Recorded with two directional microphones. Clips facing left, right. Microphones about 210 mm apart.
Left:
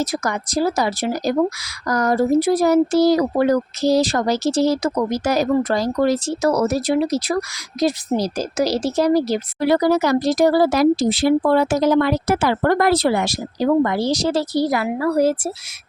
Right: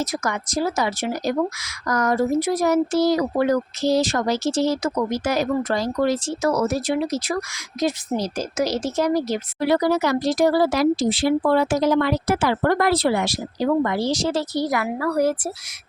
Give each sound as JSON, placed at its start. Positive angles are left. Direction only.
{"t": 0.0, "sound": "speech", "side_deg": 35}